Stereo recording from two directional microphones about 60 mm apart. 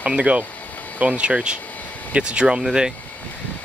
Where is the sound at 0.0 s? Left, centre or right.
Right.